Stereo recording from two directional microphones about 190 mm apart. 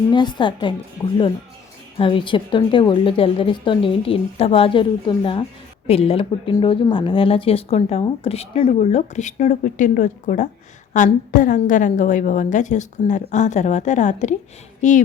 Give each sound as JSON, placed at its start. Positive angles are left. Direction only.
{"t": 0.1, "sound": "a woman's voice", "side_deg": 25}
{"t": 2.0, "sound": "a woman's voice", "side_deg": 25}